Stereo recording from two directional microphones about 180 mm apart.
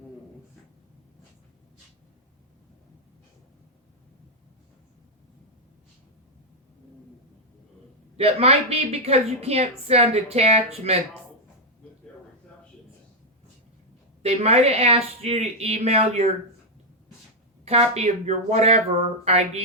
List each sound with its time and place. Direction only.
8.1 s a woman's voice: 35° right (ahead or behind)
14.2 s a woman's voice: 35° right (ahead or behind)
17.7 s a woman's voice: 35° right (ahead or behind)